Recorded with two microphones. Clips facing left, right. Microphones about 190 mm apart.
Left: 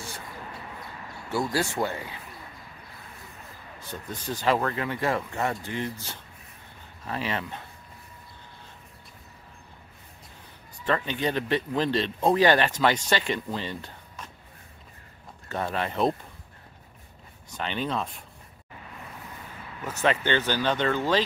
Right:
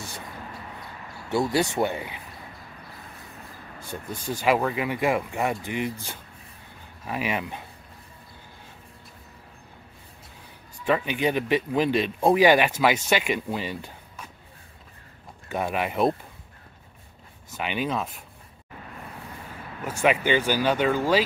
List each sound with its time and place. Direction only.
1.3 s speech: 20° right (ahead or behind)
3.8 s speech: 10° right (ahead or behind)
10.9 s speech: 10° right (ahead or behind)
15.4 s speech: 10° right (ahead or behind)
17.5 s speech: 10° right (ahead or behind)
19.8 s speech: 10° right (ahead or behind)